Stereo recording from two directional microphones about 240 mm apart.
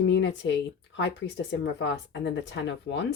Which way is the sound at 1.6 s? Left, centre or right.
Left.